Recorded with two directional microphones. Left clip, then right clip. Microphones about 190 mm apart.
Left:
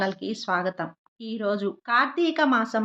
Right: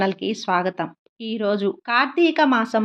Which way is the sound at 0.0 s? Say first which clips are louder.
Right 5 dB; 20° right (ahead or behind).